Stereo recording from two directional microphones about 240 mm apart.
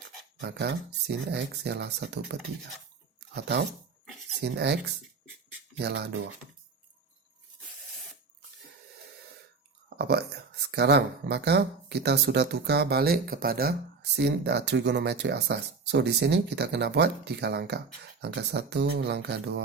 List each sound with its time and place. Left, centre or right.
0.4 s speech: right
3.3 s speech: right
5.8 s speech: right
10.0 s speech: right